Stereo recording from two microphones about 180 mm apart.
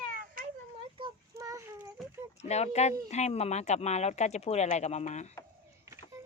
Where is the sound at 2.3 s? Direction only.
35° left (ahead or behind).